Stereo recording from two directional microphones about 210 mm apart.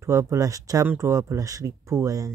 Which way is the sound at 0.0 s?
15° right (ahead or behind).